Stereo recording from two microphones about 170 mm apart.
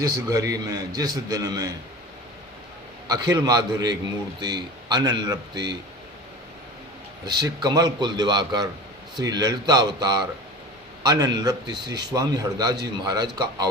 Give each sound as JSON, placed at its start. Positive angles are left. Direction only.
{"t": 0.0, "sound": "a man's voice", "side_deg": -20}
{"t": 3.1, "sound": "a man's voice", "side_deg": -20}
{"t": 7.3, "sound": "a man's voice", "side_deg": -25}